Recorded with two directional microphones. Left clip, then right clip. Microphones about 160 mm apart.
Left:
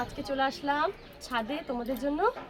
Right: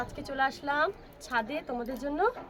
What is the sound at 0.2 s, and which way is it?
A woman's voice, 30° right (ahead or behind).